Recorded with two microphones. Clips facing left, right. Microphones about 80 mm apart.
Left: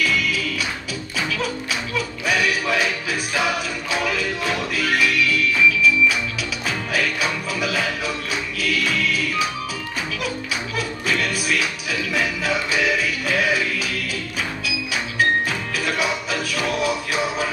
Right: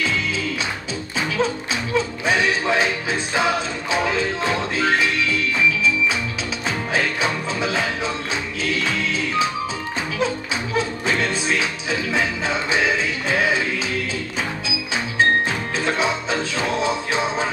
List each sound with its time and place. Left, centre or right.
0.0 s music: right
2.0 s music: right
15.8 s music: right